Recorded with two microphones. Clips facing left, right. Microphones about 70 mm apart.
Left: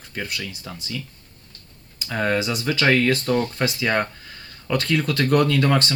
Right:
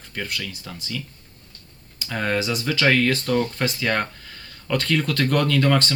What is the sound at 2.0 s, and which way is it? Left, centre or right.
Speech, centre.